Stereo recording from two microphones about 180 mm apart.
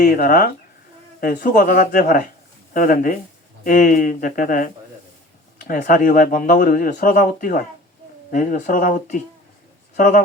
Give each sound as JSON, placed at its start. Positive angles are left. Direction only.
{"t": 0.0, "sound": "speech", "side_deg": 55}